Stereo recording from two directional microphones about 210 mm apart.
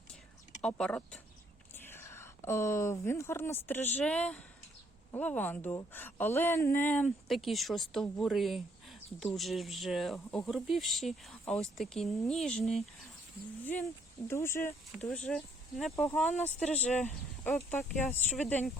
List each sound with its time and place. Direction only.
0.6 s a woman's voice: 5° left (ahead or behind)
13.7 s a woman's voice: 10° left (ahead or behind)